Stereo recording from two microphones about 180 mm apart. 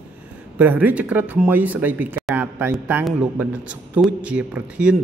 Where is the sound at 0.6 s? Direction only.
10° right (ahead or behind).